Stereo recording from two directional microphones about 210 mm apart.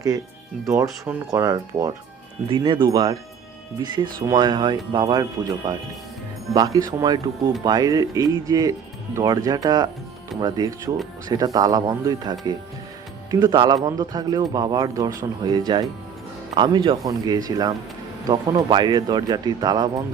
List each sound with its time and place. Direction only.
0.6 s speech: 15° right (ahead or behind)
13.4 s speech: 20° right (ahead or behind)